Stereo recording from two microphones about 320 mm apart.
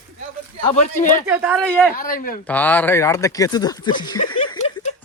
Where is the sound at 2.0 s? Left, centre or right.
Left.